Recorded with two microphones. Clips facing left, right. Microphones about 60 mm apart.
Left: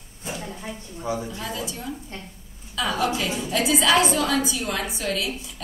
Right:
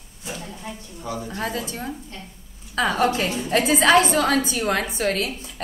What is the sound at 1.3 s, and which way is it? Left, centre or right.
A woman's voice, right.